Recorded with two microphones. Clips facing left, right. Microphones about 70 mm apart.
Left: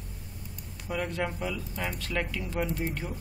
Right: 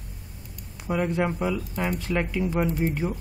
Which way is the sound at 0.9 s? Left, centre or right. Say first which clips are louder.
Right 7 dB; centre.